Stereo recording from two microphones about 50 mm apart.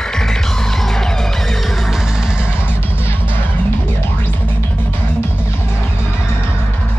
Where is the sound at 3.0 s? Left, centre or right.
Right.